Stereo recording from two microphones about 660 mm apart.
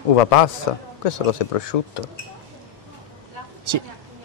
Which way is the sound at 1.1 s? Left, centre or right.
Left.